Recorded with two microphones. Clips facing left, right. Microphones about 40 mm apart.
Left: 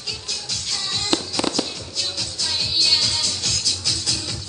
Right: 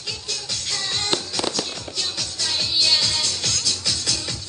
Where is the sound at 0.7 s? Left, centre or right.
Centre.